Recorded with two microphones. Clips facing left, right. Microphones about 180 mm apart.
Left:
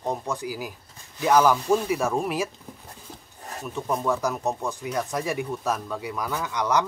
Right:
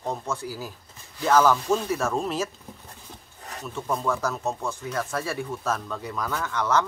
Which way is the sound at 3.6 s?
15° left (ahead or behind).